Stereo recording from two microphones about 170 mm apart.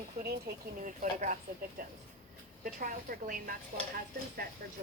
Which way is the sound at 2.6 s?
55° right (ahead or behind).